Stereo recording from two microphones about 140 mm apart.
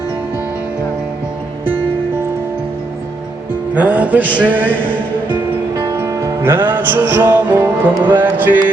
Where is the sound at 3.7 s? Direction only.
10° right (ahead or behind).